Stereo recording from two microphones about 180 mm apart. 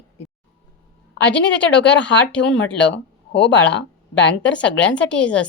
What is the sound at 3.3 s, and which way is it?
Speech, 90° left.